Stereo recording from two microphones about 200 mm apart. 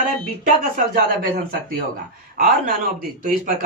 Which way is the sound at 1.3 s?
45° right (ahead or behind).